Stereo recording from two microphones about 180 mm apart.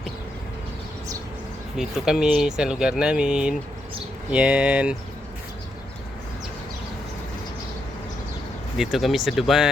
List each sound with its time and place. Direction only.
1.7 s speech: 5° right (ahead or behind)
8.8 s speech: centre (ahead or behind)